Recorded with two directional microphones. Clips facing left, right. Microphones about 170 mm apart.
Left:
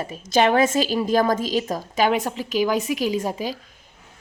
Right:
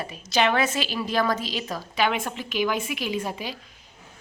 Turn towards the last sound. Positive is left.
turn(degrees=40)  # may be behind; listen again after turning